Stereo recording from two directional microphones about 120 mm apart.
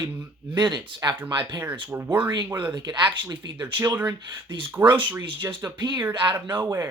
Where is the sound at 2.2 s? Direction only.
40° right (ahead or behind).